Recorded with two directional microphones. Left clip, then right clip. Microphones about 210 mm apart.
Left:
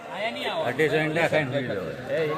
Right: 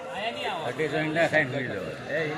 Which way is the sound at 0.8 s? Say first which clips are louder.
Left 2 dB; 40° left (ahead or behind).